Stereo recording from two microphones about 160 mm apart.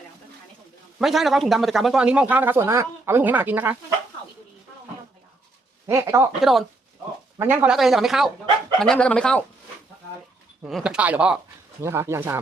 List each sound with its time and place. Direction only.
0.9 s a man's voice: centre (ahead or behind)
5.8 s speech: 20° right (ahead or behind)
6.4 s speech: centre (ahead or behind)
10.7 s a man's voice: 5° right (ahead or behind)